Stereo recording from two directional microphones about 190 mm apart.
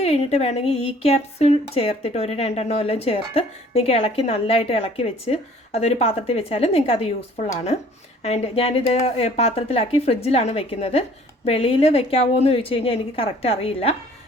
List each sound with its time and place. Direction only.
0.0 s speech: 35° left (ahead or behind)